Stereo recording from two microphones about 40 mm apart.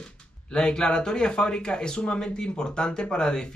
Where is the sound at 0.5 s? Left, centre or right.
Left.